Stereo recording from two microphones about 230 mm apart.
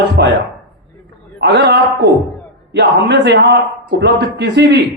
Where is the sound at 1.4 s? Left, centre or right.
Right.